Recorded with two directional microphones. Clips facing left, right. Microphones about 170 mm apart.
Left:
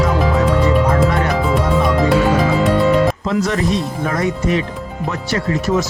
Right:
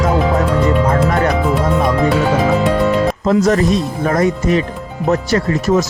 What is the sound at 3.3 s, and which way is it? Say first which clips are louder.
Speech: right 5 dB; 40° right (ahead or behind).